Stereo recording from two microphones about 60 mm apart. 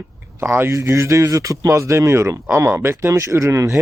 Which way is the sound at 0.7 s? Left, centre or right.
Right.